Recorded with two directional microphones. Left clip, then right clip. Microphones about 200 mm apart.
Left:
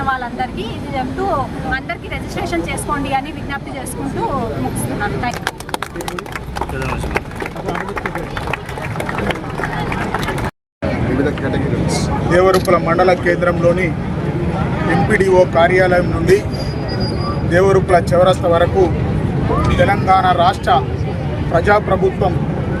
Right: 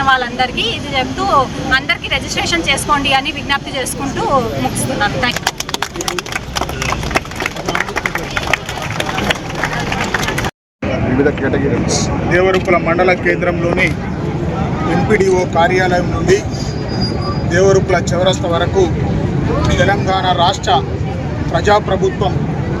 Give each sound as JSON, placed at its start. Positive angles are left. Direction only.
{"t": 0.0, "sound": "speech", "side_deg": 0}
{"t": 11.4, "sound": "speech", "side_deg": -35}
{"t": 12.3, "sound": "speech", "side_deg": 15}
{"t": 15.1, "sound": "speech", "side_deg": 15}
{"t": 17.5, "sound": "speech", "side_deg": 15}